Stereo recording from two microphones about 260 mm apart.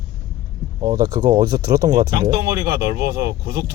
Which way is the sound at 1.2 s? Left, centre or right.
Centre.